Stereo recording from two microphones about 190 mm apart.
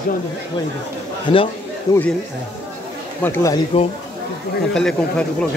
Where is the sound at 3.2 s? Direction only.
10° left (ahead or behind).